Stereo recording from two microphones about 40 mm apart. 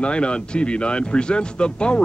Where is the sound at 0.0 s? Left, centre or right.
Left.